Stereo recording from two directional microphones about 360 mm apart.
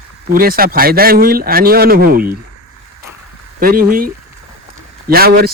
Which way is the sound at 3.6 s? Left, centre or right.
Right.